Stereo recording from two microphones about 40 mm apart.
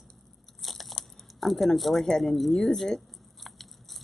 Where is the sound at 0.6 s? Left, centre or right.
Centre.